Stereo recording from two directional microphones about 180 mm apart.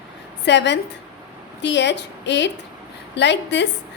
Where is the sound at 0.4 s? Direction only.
75° left (ahead or behind).